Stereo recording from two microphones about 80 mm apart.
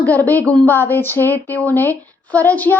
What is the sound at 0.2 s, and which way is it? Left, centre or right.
Speech, left.